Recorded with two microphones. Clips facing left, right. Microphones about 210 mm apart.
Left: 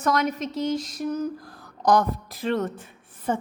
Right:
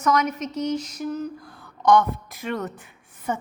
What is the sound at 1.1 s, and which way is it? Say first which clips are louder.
Speech: left 4 dB; 40° left (ahead or behind).